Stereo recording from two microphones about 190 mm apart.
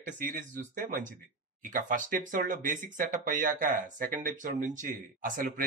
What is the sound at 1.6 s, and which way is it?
Speech, 45° right (ahead or behind).